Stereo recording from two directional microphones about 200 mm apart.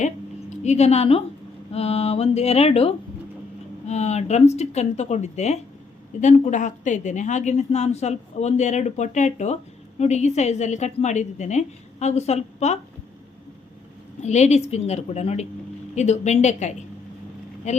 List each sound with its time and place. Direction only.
0.6 s a woman's voice: 35° left (ahead or behind)
14.2 s a woman's voice: 35° left (ahead or behind)